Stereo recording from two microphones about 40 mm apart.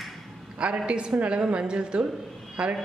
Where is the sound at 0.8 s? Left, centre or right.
Right.